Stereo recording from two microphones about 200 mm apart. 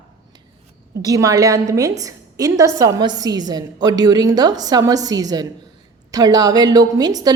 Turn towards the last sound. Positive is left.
turn(degrees=-20)  # may be behind; listen again after turning